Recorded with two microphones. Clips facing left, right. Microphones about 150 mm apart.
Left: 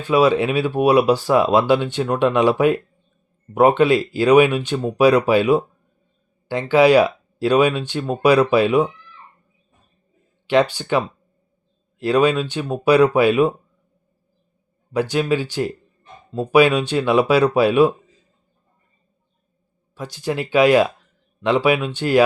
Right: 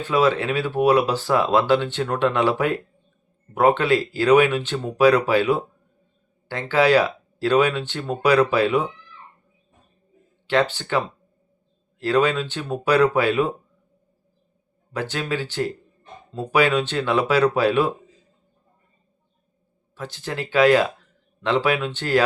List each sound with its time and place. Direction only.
0.0 s speech: 15° left (ahead or behind)
10.4 s speech: 15° left (ahead or behind)
14.9 s speech: 15° left (ahead or behind)
20.0 s speech: 15° left (ahead or behind)